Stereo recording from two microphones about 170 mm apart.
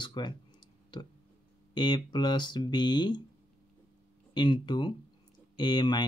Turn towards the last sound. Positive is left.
turn(degrees=25)  # may be behind; listen again after turning